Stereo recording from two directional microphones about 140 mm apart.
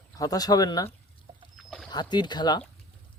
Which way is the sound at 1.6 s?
Centre (ahead or behind).